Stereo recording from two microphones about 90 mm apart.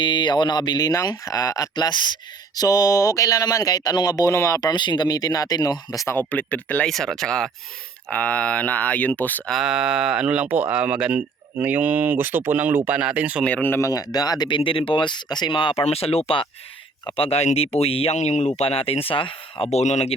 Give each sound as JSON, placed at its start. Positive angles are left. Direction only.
{"t": 0.0, "sound": "speech", "side_deg": 60}
{"t": 1.7, "sound": "speech", "side_deg": 55}
{"t": 2.6, "sound": "speech", "side_deg": 40}
{"t": 4.3, "sound": "speech", "side_deg": 35}
{"t": 4.7, "sound": "speech", "side_deg": 55}
{"t": 6.1, "sound": "speech", "side_deg": 20}
{"t": 6.8, "sound": "speech", "side_deg": 5}
{"t": 9.5, "sound": "speech", "side_deg": -5}
{"t": 13.4, "sound": "speech", "side_deg": 15}
{"t": 13.7, "sound": "speech", "side_deg": 40}